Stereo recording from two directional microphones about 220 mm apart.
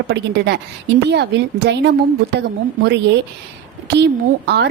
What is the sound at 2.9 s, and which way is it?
Speech, 50° right (ahead or behind).